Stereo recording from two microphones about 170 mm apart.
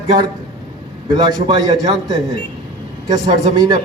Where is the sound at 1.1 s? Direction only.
25° right (ahead or behind).